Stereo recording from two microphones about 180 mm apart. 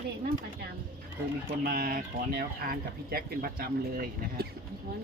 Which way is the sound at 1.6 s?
55° right (ahead or behind).